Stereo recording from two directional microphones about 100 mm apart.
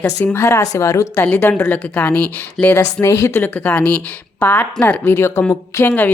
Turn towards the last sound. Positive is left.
turn(degrees=20)  # may be behind; listen again after turning